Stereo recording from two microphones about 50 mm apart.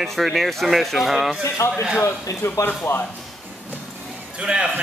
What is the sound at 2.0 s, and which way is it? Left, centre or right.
Speech, left.